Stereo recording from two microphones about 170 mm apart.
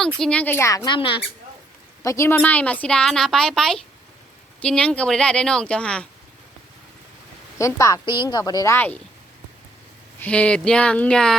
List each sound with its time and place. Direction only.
0.2 s speech: 5° left (ahead or behind)
0.9 s speech: 30° left (ahead or behind)
2.0 s a woman's voice: 15° left (ahead or behind)
7.6 s speech: 20° left (ahead or behind)
10.2 s speech: 10° left (ahead or behind)